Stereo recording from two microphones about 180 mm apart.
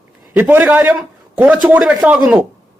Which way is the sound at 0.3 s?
10° right (ahead or behind).